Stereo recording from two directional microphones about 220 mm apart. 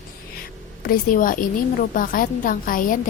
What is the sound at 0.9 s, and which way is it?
A woman's voice, 40° left (ahead or behind).